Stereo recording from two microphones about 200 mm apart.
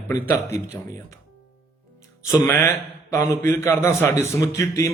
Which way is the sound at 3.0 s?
15° left (ahead or behind).